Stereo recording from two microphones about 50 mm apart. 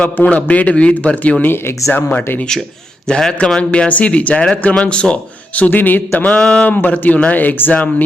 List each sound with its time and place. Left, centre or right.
0.0 s a man's voice: left
3.1 s a man's voice: centre; by 6.4 s left
6.4 s a man's voice: left
6.7 s speech: left